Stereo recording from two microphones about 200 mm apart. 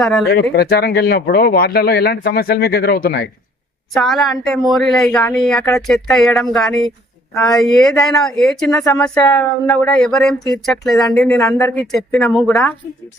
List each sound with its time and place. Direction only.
0.0 s a woman's voice: centre (ahead or behind)
0.5 s speech: 50° left (ahead or behind)
3.9 s a woman's voice: centre (ahead or behind)